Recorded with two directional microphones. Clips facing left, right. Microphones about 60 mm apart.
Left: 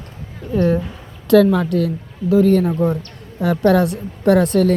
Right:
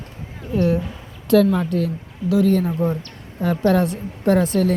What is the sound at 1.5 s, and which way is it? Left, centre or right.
Speech, left.